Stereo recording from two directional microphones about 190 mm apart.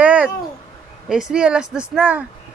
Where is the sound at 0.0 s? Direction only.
5° right (ahead or behind).